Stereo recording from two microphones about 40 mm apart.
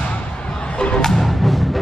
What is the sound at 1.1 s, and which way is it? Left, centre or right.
Music, centre.